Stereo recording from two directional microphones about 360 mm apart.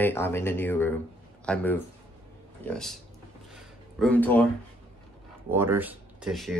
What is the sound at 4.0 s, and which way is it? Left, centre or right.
Speech, centre.